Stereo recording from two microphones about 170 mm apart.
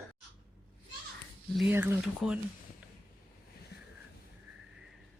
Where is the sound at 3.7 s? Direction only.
75° left (ahead or behind).